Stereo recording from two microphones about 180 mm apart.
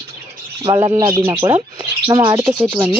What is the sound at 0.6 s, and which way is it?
Speech, 20° right (ahead or behind).